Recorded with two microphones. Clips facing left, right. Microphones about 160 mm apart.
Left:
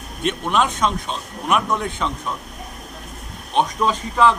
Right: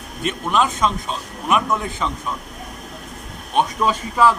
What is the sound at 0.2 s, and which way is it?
A man's voice, centre (ahead or behind).